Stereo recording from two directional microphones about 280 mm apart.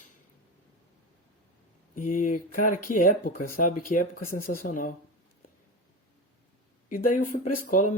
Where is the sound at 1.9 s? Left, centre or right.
Left.